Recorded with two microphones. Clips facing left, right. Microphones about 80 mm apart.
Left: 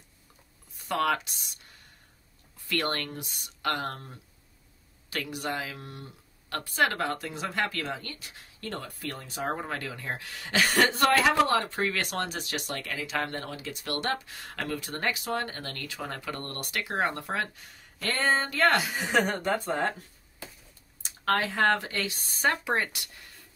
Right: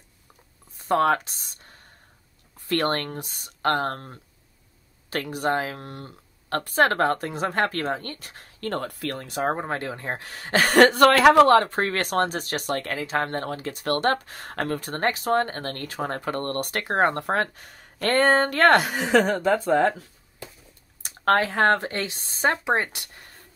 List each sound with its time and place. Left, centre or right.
0.7 s speech: right
9.5 s speech: right
21.0 s speech: right